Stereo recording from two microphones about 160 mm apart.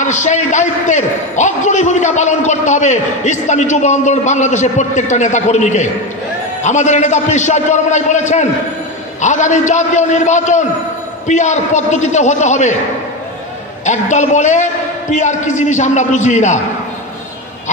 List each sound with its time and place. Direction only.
0.0 s a man's voice: 50° left (ahead or behind)
13.8 s a man's voice: 50° left (ahead or behind)